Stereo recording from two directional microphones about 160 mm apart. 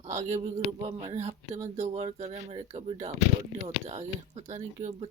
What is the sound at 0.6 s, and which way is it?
Speech, 40° right (ahead or behind).